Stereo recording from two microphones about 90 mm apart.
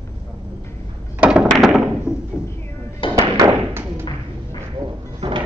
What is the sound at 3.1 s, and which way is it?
Thump, 40° right (ahead or behind).